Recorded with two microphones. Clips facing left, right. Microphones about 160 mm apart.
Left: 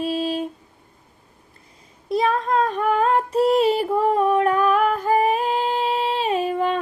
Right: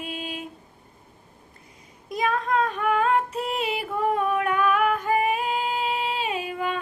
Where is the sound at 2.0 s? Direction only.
35° left (ahead or behind).